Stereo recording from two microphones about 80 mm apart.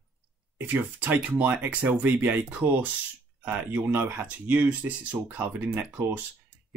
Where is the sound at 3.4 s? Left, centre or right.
Right.